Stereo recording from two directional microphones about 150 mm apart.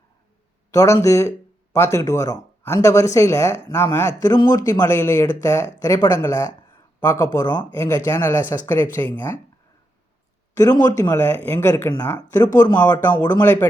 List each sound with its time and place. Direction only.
0.7 s speech: 20° left (ahead or behind)
10.5 s speech: 25° left (ahead or behind)
12.5 s speech: 25° left (ahead or behind)
13.4 s speech: 15° left (ahead or behind)